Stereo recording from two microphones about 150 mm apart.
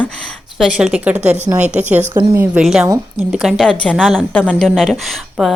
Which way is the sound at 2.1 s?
20° right (ahead or behind).